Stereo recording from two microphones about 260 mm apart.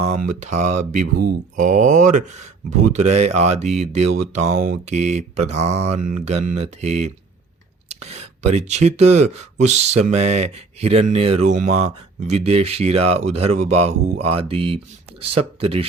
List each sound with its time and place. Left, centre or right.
0.2 s speech: right